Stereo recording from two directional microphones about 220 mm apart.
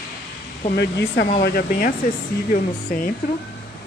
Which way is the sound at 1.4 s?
45° left (ahead or behind).